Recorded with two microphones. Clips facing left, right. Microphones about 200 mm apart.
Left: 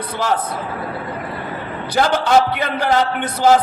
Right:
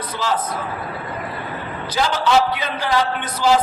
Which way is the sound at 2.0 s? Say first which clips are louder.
Left 3 dB; 55° left (ahead or behind).